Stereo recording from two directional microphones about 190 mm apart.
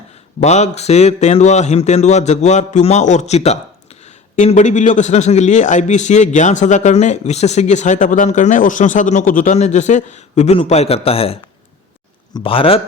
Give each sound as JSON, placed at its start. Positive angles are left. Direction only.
{"t": 0.3, "sound": "a man's voice", "side_deg": 35}